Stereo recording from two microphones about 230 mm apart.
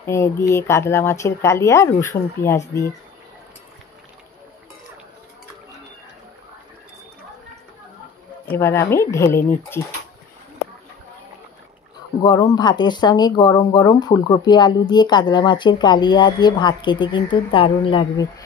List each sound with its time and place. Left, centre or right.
0.0 s speech: centre
8.5 s speech: centre
12.3 s speech: centre